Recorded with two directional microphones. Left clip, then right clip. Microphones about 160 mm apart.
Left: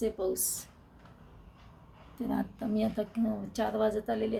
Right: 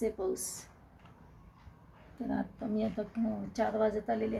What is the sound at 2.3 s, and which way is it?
Speech, 25° left (ahead or behind).